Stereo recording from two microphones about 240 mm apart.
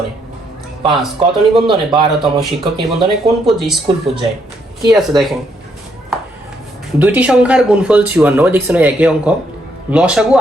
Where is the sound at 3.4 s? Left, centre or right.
Centre.